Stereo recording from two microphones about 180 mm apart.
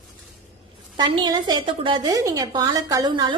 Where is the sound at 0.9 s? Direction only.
25° right (ahead or behind).